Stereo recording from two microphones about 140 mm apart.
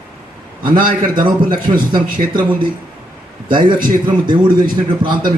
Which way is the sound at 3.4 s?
35° right (ahead or behind).